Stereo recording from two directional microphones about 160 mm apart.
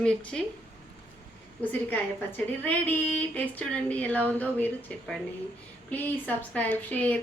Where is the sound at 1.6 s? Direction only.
10° left (ahead or behind).